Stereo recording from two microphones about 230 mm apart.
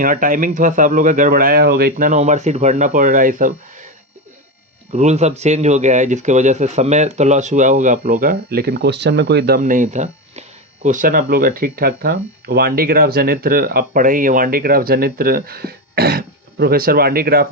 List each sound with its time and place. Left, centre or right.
0.0 s speech: right
4.9 s speech: right